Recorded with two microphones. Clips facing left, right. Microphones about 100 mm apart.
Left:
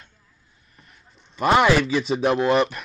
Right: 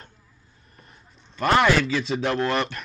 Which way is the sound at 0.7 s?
35° right (ahead or behind).